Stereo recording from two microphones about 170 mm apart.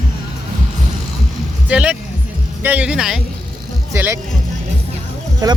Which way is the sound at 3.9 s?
15° right (ahead or behind).